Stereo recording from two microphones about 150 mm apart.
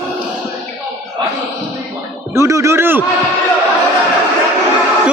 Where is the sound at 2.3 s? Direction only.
20° right (ahead or behind).